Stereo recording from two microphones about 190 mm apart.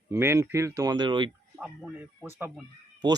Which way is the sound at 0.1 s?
15° right (ahead or behind).